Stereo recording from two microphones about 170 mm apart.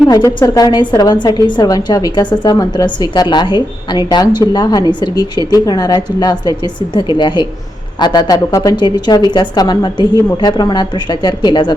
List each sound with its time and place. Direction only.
0.1 s a woman's voice: 20° left (ahead or behind)